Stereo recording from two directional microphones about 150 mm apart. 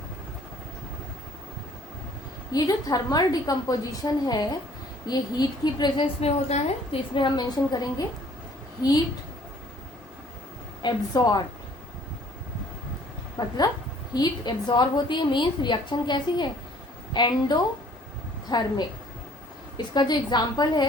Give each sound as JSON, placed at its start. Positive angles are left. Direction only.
{"t": 2.5, "sound": "a woman's voice", "side_deg": 25}
{"t": 6.1, "sound": "a woman's voice", "side_deg": 40}
{"t": 10.8, "sound": "a woman's voice", "side_deg": 25}
{"t": 13.4, "sound": "a woman's voice", "side_deg": 30}
{"t": 19.7, "sound": "a woman's voice", "side_deg": 30}